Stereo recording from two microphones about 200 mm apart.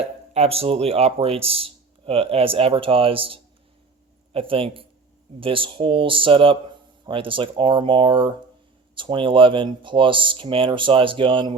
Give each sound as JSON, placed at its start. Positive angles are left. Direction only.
{"t": 0.0, "sound": "a man's voice", "side_deg": -30}